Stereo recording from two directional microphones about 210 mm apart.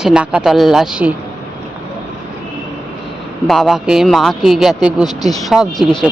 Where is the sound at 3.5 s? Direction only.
Centre (ahead or behind).